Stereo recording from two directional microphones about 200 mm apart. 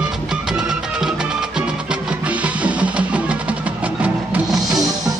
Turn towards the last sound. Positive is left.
turn(degrees=-20)  # may be behind; listen again after turning